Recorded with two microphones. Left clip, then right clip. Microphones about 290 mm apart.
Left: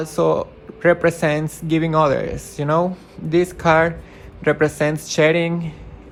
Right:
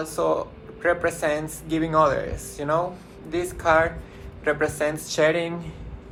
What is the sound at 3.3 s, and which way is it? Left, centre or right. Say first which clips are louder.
Speech: left 5 dB; left.